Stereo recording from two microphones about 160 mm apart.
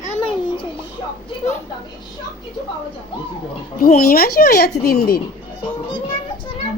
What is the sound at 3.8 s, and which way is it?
A child's voice, 70° left (ahead or behind).